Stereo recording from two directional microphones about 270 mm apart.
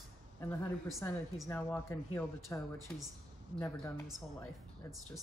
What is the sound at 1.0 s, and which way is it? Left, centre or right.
Speech, centre.